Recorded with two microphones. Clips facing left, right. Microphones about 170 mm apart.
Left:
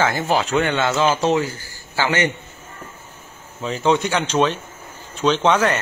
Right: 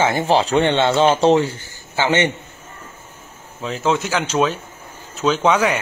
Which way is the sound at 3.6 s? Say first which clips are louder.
Left 1 dB; centre (ahead or behind).